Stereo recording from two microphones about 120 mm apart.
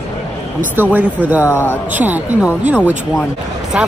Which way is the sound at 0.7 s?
15° right (ahead or behind).